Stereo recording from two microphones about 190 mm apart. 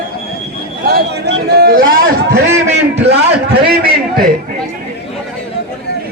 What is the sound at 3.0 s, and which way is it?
Speech, 60° right (ahead or behind).